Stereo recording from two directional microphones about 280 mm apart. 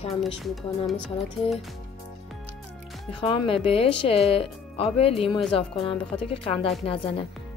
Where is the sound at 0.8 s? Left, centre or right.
Centre.